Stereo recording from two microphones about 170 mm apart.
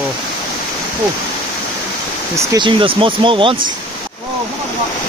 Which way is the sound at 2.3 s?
25° right (ahead or behind).